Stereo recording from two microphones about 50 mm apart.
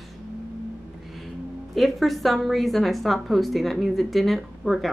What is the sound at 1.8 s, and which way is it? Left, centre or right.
A woman's voice, centre.